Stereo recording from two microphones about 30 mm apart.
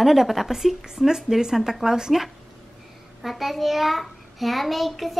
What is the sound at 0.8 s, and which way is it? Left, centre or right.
Speech, centre.